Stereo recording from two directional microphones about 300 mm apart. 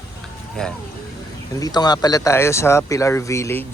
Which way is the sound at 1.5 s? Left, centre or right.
Centre.